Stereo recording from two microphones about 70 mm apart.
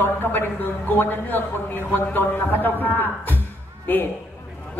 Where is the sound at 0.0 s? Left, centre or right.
Left.